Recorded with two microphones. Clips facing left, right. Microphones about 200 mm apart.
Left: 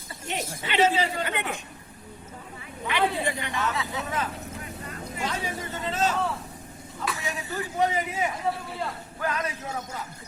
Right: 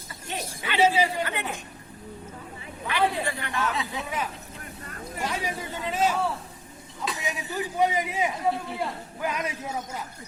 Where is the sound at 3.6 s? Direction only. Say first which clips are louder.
Right 1 dB; 10° right (ahead or behind).